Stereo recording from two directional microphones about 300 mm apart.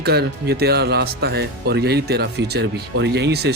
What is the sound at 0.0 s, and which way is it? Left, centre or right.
Speech, right.